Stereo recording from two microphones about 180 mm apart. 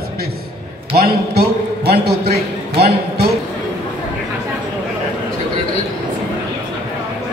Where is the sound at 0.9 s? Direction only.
60° right (ahead or behind).